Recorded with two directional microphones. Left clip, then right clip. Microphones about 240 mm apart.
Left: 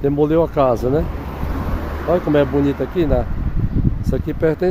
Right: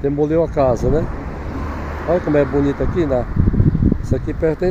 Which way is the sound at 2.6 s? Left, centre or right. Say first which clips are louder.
Even; left.